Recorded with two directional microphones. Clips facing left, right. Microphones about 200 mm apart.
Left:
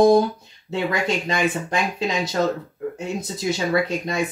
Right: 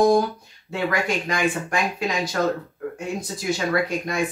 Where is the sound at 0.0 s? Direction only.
20° left (ahead or behind).